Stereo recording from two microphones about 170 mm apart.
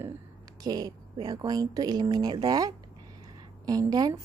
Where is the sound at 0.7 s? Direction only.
25° right (ahead or behind).